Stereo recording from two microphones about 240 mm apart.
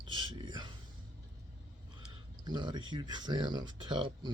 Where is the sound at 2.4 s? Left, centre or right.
Centre.